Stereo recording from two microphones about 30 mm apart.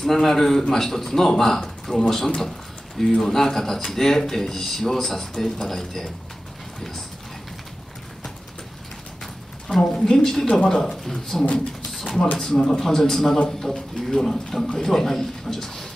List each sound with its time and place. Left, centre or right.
0.0 s a man's voice: centre
9.8 s a woman's voice: left